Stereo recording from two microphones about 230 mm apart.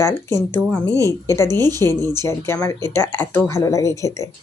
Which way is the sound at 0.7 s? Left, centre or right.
Centre.